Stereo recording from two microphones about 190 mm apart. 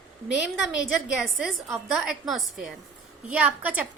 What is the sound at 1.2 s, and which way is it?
A woman's voice, 5° right (ahead or behind).